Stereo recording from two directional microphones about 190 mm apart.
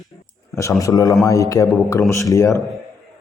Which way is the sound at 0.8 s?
20° left (ahead or behind).